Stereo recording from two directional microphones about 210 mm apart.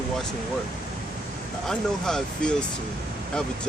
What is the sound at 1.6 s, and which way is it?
Speech, centre (ahead or behind).